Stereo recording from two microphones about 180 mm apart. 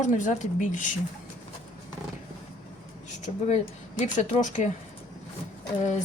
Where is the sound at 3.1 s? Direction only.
40° left (ahead or behind).